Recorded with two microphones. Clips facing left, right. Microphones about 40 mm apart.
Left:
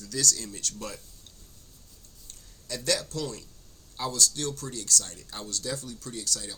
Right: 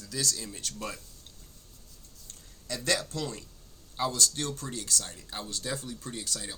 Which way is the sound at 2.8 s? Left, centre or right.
Right.